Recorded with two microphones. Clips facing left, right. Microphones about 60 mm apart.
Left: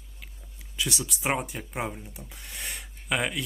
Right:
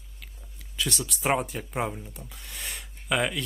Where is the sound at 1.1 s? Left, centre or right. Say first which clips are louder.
Right 5 dB; centre.